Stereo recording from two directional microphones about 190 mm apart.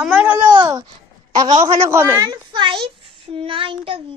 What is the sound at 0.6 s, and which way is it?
Babbling, 20° right (ahead or behind).